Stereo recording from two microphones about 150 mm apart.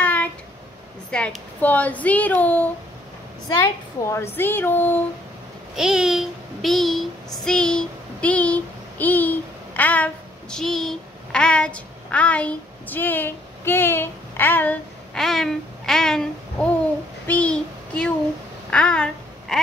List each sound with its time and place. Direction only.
0.0 s a sound: 10° left (ahead or behind)
1.1 s speech: 10° left (ahead or behind)
4.0 s a woman's voice: 20° left (ahead or behind)
5.8 s child singing: 5° right (ahead or behind); by 14.8 s 10° left (ahead or behind)
15.1 s speech: centre (ahead or behind)
17.3 s child singing: 10° left (ahead or behind)
18.7 s babbling: 5° left (ahead or behind)